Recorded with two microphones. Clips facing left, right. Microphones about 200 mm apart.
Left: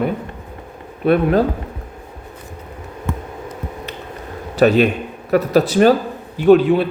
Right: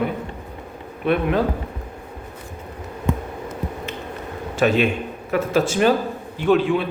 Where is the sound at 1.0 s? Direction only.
40° left (ahead or behind).